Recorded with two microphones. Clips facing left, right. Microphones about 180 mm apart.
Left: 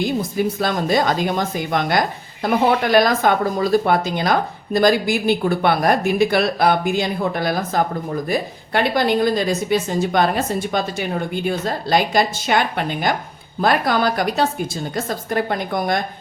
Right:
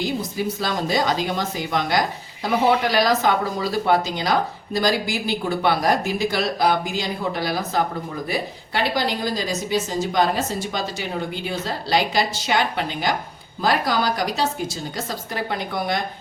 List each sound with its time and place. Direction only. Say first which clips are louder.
0.0 s a woman's voice: left 4 dB; 55° left (ahead or behind)